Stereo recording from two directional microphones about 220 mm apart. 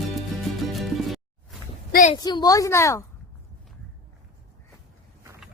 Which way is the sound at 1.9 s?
35° left (ahead or behind).